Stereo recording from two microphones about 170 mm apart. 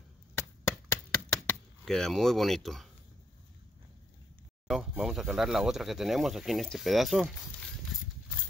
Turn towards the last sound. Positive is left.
turn(degrees=0)  # may be behind; listen again after turning